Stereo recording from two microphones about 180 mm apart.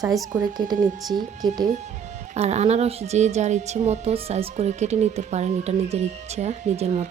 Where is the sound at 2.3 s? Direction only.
35° right (ahead or behind).